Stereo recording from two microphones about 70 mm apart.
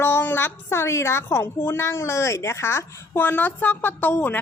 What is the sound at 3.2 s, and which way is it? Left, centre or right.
A woman's voice, left.